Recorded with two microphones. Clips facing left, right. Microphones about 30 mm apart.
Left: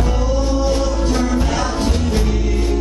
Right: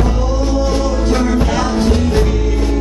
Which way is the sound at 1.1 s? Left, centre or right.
Right.